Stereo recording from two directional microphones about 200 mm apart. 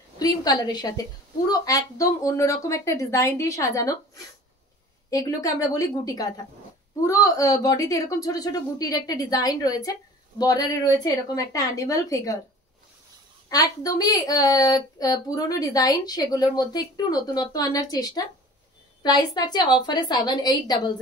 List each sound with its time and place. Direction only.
0.2 s a woman's voice: 20° left (ahead or behind)
13.5 s a woman's voice: 20° left (ahead or behind)